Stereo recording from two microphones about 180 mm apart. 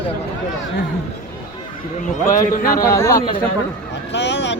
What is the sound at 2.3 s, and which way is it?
Speech, 50° left (ahead or behind).